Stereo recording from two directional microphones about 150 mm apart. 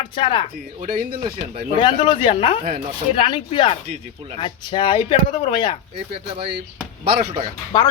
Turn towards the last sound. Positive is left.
turn(degrees=30)  # may be behind; listen again after turning